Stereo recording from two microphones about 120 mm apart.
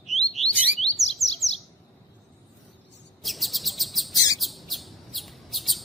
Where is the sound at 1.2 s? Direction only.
25° left (ahead or behind).